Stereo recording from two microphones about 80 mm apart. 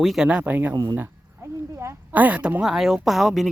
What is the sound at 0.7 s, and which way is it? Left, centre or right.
Speech, right.